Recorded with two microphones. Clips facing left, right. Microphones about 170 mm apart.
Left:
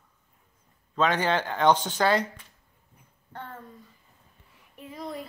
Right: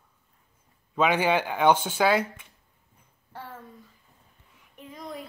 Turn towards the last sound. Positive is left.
turn(degrees=0)  # may be behind; listen again after turning